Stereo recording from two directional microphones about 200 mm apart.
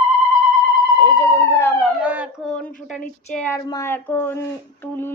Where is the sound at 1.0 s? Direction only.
20° left (ahead or behind).